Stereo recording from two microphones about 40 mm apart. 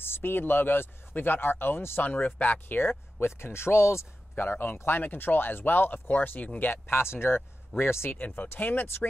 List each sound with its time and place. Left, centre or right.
0.0 s speech: left
2.0 s speech: left
3.2 s speech: left
4.4 s speech: left
6.4 s speech: left
7.2 s a man's voice: left
7.8 s speech: left
8.3 s a man's voice: left
8.5 s speech: left